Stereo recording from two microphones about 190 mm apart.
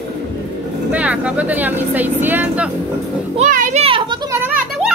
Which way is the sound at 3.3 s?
40° right (ahead or behind).